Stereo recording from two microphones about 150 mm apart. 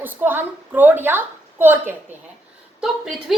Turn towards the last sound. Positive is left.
turn(degrees=-5)  # may be behind; listen again after turning